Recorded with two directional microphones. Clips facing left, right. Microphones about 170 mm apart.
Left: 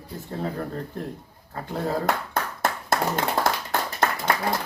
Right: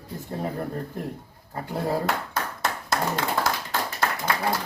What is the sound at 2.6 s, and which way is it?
Clapping, 50° left (ahead or behind).